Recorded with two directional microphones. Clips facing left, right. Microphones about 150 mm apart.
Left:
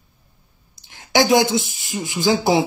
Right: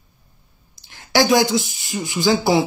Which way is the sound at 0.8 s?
20° left (ahead or behind).